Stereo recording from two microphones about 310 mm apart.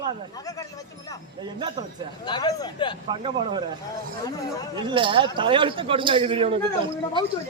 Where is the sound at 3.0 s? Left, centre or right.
Centre.